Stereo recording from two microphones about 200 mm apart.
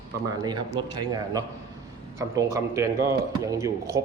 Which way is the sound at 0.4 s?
20° right (ahead or behind).